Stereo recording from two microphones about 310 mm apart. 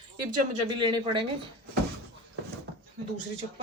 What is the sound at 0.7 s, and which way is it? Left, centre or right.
Speech, centre.